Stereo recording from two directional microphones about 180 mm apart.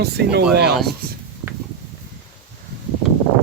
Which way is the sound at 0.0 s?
65° right (ahead or behind).